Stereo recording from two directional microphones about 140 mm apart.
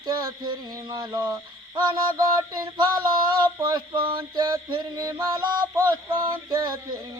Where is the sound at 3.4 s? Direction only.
30° right (ahead or behind).